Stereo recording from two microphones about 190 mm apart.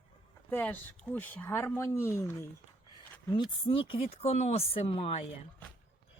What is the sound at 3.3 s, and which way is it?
Speech, 25° left (ahead or behind).